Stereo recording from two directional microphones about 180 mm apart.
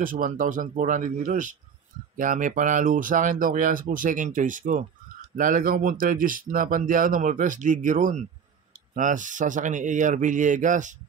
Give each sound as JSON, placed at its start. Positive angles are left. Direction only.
{"t": 0.0, "sound": "speech", "side_deg": -50}